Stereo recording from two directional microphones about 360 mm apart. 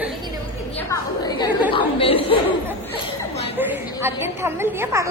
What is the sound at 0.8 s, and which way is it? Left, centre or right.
A woman's voice, centre.